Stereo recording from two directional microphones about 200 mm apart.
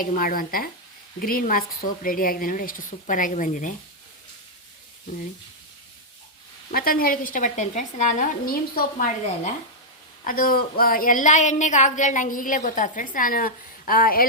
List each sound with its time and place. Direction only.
0.0 s a woman's voice: 45° left (ahead or behind)
6.7 s a woman's voice: 45° left (ahead or behind)
10.2 s a woman's voice: 45° left (ahead or behind)